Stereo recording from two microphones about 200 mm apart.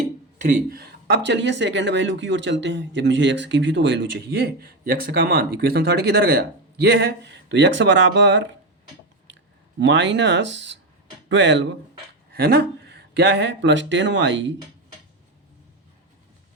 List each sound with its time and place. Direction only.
0.7 s speech: 55° right (ahead or behind)
9.7 s speech: 65° right (ahead or behind)
12.3 s speech: 50° right (ahead or behind); by 14.5 s 65° right (ahead or behind)